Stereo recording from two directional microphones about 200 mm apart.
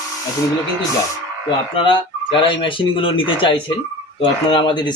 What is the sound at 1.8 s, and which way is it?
Speech, 25° left (ahead or behind).